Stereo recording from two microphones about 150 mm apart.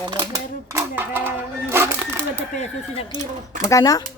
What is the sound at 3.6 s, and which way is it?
Speech, 20° left (ahead or behind).